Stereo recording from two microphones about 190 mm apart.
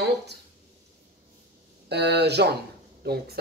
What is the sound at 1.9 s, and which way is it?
Speech, 60° right (ahead or behind).